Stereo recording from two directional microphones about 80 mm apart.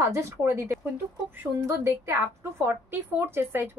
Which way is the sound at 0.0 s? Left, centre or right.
Right.